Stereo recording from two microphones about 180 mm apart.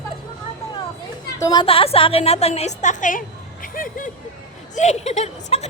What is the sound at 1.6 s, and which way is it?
A woman's voice, 30° left (ahead or behind).